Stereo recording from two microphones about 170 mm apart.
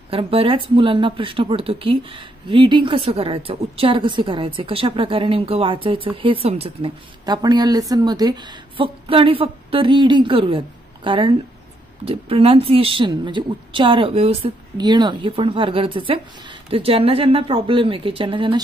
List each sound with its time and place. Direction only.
0.1 s a woman's voice: 35° right (ahead or behind)